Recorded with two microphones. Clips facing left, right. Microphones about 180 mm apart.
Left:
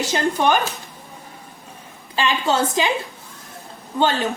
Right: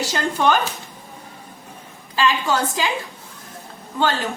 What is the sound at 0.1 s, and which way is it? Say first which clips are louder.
Speech: left 1 dB; 15° left (ahead or behind).